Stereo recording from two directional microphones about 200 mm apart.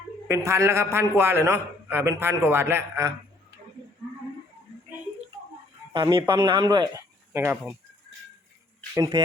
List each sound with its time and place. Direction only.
0.3 s a man's voice: 15° right (ahead or behind)
5.9 s speech: 25° right (ahead or behind); by 7.8 s 10° right (ahead or behind)
9.0 s speech: 20° right (ahead or behind)